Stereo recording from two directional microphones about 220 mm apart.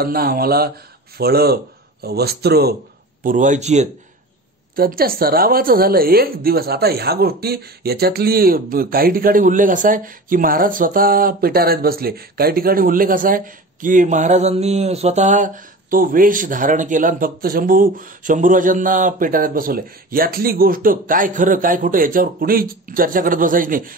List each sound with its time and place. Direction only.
0.0 s speech: 45° right (ahead or behind)
3.3 s a woman's voice: 35° right (ahead or behind)
4.7 s a woman's voice: 40° right (ahead or behind)